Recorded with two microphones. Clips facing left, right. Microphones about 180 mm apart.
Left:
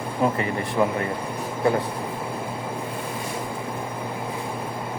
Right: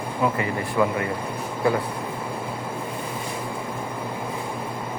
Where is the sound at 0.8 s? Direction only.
35° left (ahead or behind).